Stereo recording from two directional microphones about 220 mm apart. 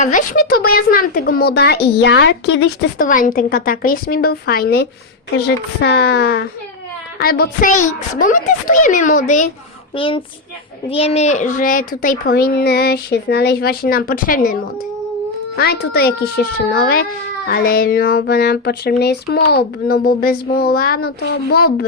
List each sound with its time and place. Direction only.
0.0 s a child's voice: 35° left (ahead or behind)
3.0 s a child's voice: 35° left (ahead or behind)
9.9 s a child's voice: 25° left (ahead or behind); by 21.3 s 45° left (ahead or behind)